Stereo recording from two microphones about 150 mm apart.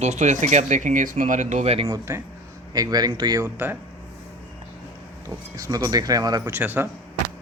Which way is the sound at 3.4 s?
15° right (ahead or behind).